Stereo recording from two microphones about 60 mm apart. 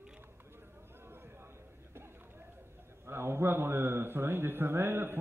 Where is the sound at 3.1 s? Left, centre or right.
Right.